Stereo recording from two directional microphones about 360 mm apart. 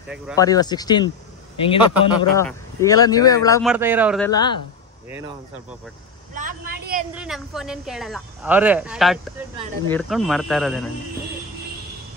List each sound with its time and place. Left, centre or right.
0.4 s speech: centre
3.6 s speech: centre
4.3 s speech: centre
6.3 s vehicle: right
7.2 s speech: centre